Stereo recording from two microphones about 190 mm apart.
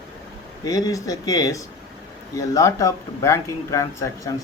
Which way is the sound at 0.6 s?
20° left (ahead or behind).